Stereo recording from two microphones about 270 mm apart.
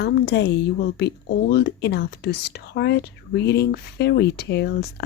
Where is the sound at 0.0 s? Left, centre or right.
Left.